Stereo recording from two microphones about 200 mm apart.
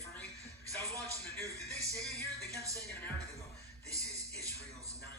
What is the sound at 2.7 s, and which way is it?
Music, 10° left (ahead or behind).